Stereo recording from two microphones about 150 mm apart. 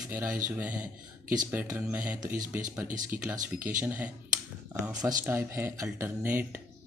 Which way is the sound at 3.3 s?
65° right (ahead or behind).